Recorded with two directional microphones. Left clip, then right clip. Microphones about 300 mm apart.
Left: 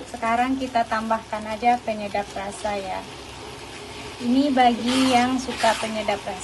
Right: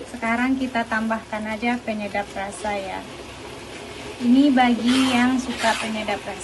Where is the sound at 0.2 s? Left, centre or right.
Centre.